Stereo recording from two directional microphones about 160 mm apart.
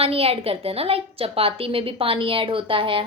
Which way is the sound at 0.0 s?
40° right (ahead or behind).